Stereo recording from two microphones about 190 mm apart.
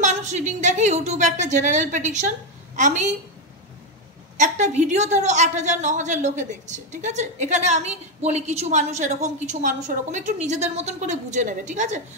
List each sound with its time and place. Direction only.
0.0 s a woman's voice: 40° right (ahead or behind)
4.4 s a woman's voice: 40° right (ahead or behind)